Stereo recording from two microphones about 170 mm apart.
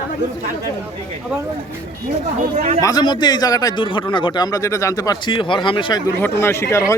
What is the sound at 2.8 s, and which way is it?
A man's voice, 20° left (ahead or behind).